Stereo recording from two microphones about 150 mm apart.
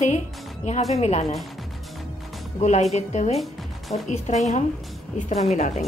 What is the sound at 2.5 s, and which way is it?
A woman's voice, 50° left (ahead or behind).